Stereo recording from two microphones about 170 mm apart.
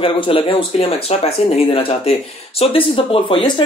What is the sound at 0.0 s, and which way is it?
A woman's voice, 30° left (ahead or behind).